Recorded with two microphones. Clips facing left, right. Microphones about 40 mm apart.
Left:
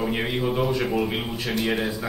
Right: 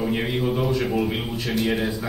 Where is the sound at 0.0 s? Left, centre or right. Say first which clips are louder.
Right 1 dB; centre.